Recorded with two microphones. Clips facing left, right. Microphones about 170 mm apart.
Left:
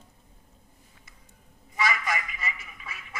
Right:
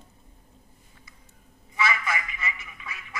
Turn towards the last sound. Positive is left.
turn(degrees=35)  # may be behind; listen again after turning